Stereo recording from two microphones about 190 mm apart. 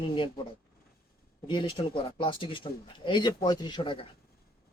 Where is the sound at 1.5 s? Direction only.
25° left (ahead or behind).